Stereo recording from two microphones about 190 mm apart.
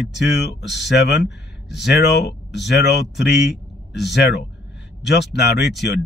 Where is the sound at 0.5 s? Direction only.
65° left (ahead or behind).